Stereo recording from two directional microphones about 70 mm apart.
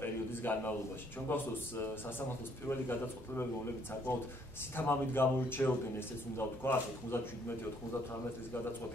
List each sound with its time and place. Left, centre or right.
0.0 s a sound: left
1.3 s speech: left
4.7 s speech: left